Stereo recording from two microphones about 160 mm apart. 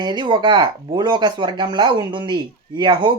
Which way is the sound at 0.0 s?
30° right (ahead or behind).